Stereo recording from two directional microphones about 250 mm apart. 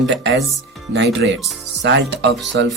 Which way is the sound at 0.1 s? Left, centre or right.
Right.